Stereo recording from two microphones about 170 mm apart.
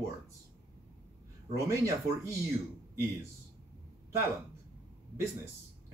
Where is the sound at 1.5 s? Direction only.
15° right (ahead or behind).